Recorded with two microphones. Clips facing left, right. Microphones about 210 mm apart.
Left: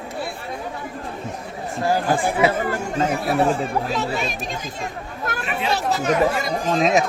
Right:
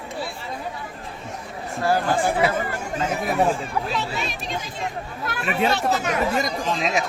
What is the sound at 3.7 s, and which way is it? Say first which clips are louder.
Speech: left 3 dB; 45° left (ahead or behind).